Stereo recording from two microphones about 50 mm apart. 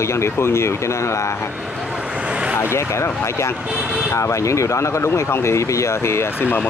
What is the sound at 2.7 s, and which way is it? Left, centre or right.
Speech, left.